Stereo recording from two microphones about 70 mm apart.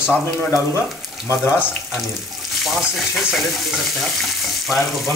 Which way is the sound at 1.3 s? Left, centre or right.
Left.